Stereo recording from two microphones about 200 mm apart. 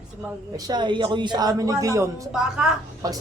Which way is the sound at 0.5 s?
20° right (ahead or behind).